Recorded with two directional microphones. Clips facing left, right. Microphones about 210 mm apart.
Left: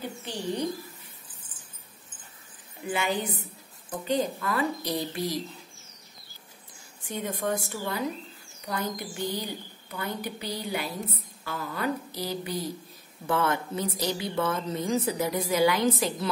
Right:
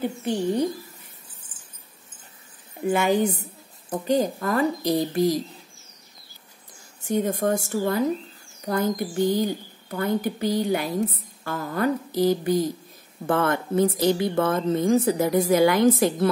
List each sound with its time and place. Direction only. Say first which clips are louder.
1.4 s a sound: right 1 dB; 30° right (ahead or behind)
2.9 s a woman's voice: right 8 dB; 45° right (ahead or behind)
7.0 s a woman's voice: right 9 dB; 45° right (ahead or behind)